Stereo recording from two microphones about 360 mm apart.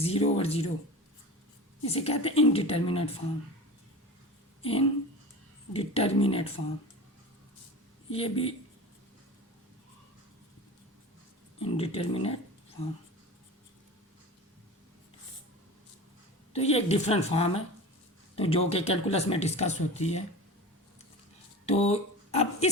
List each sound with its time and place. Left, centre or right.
0.0 s speech: centre
1.8 s speech: centre
4.6 s speech: centre
8.1 s speech: centre
11.6 s speech: centre
16.5 s speech: centre
21.7 s speech: centre